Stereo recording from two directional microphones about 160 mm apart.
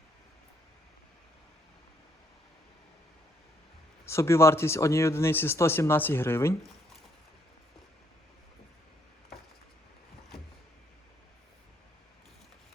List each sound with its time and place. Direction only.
4.0 s speech: 15° left (ahead or behind)